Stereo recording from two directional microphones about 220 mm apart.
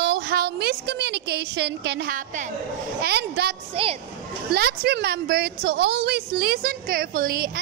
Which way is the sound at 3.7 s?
25° right (ahead or behind).